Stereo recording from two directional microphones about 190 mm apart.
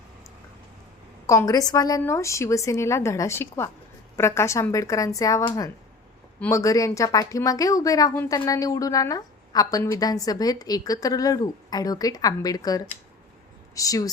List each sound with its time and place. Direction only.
1.3 s a woman's voice: 15° left (ahead or behind)